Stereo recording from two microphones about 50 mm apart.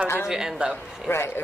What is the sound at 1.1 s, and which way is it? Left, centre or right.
Speech, left.